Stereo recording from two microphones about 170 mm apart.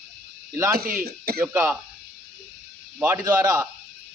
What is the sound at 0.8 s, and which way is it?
Speech, 60° right (ahead or behind).